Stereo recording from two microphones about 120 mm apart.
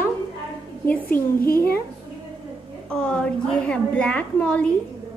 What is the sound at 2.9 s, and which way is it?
A woman's voice, 10° left (ahead or behind).